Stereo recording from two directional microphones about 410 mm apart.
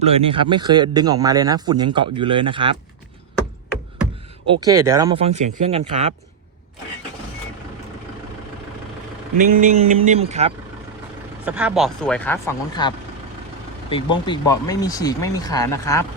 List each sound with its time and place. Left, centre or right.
0.2 s speech: centre
4.6 s speech: centre
9.4 s speech: centre
11.4 s speech: centre
13.9 s speech: centre